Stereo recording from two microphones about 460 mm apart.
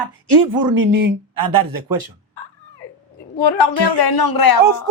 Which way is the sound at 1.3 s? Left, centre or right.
Right.